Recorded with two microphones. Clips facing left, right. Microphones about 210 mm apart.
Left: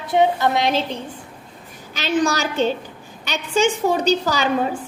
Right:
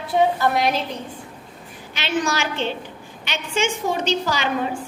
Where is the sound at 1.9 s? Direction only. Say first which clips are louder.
Left 4 dB; 40° left (ahead or behind).